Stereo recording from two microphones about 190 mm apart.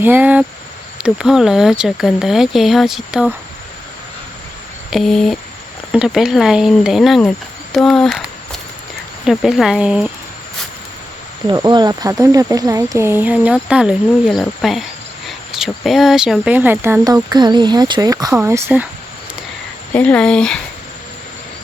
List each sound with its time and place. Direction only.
0.0 s speech: 10° right (ahead or behind)
4.9 s speech: centre (ahead or behind)
11.4 s speech: 20° right (ahead or behind)
19.9 s speech: 5° left (ahead or behind)